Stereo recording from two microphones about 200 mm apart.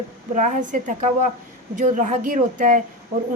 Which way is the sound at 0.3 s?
40° right (ahead or behind).